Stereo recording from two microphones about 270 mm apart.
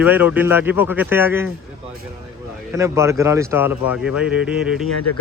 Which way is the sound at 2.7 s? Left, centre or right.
Centre.